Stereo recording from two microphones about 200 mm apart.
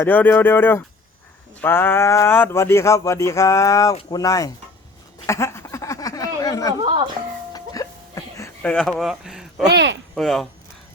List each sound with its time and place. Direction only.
0.0 s speech: 10° left (ahead or behind)
5.2 s a sound: 15° left (ahead or behind)
7.5 s music: 15° left (ahead or behind)
8.7 s speech: 5° left (ahead or behind)
9.7 s speech: 60° right (ahead or behind)
10.2 s speech: centre (ahead or behind)